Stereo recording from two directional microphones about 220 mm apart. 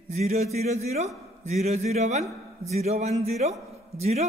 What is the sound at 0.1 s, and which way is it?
A man's voice, 30° right (ahead or behind).